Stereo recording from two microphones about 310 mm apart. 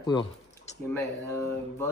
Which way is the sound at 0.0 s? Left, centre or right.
Centre.